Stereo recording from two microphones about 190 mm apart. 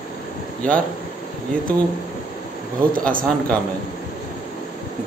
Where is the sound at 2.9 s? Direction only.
45° right (ahead or behind).